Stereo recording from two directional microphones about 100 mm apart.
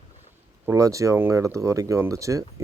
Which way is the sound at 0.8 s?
30° right (ahead or behind).